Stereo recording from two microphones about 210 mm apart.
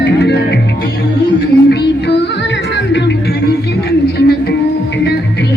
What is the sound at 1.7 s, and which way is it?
Music, 55° left (ahead or behind).